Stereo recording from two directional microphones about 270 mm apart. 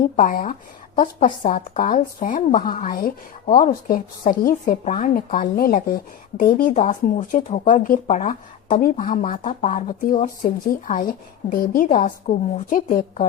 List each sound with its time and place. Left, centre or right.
0.0 s a woman's voice: left